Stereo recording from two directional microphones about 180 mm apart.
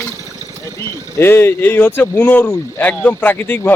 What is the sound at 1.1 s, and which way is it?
Speech, 10° left (ahead or behind).